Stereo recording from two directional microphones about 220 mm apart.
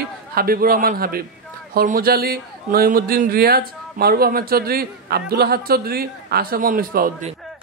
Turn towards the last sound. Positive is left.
turn(degrees=-40)  # may be behind; listen again after turning